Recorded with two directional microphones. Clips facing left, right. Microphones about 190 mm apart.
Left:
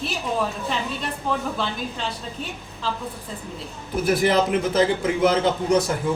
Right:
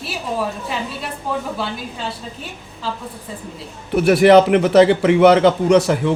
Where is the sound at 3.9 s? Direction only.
70° right (ahead or behind).